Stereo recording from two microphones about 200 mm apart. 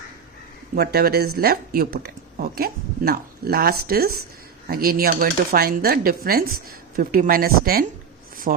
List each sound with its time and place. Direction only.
0.8 s speech: 50° right (ahead or behind)